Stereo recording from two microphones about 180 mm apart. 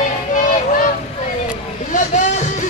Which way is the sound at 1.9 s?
45° left (ahead or behind).